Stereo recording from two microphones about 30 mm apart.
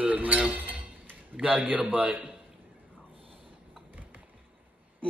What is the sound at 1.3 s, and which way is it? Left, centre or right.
Speech, right.